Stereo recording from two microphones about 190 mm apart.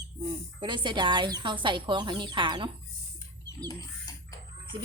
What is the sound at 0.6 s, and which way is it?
Speech, 25° right (ahead or behind).